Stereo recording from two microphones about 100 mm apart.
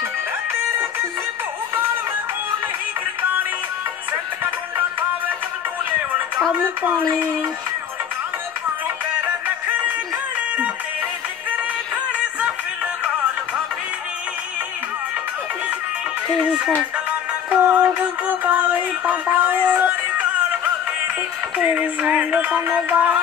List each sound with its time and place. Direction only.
12.1 s music: 10° right (ahead or behind)
16.3 s music: 10° right (ahead or behind)
21.5 s music: 10° right (ahead or behind)